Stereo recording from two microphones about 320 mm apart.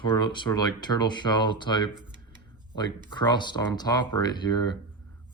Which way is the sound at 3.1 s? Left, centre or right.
Centre.